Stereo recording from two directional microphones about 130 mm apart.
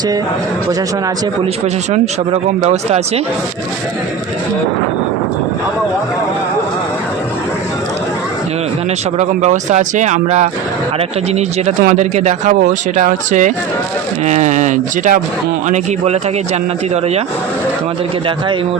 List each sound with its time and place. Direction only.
1.9 s speech: 55° right (ahead or behind)
9.1 s speech: 65° right (ahead or behind)